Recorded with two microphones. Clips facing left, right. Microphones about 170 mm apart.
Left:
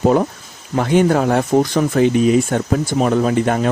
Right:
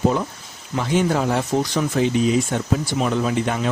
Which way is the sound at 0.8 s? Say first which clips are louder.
Left 6 dB; 55° left (ahead or behind).